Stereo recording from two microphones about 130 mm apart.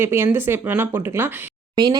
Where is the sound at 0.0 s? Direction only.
20° right (ahead or behind).